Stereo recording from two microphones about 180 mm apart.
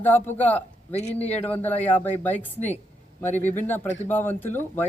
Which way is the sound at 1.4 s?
10° left (ahead or behind).